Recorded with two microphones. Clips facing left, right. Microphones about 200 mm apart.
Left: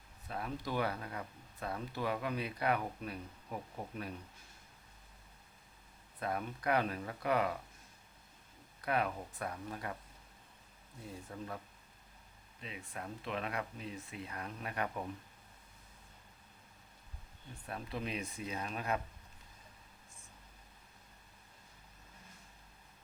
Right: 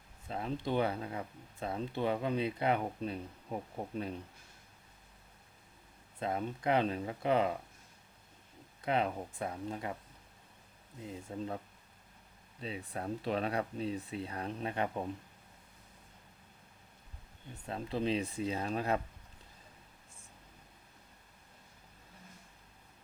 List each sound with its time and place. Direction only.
0.3 s speech: 25° right (ahead or behind)
6.1 s speech: 25° right (ahead or behind)
8.8 s speech: 25° right (ahead or behind)
11.0 s speech: 25° right (ahead or behind)
17.7 s speech: 25° right (ahead or behind)